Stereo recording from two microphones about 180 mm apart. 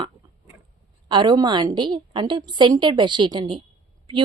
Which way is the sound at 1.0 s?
25° right (ahead or behind).